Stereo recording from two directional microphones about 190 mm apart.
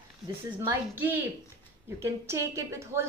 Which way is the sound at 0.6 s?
10° right (ahead or behind).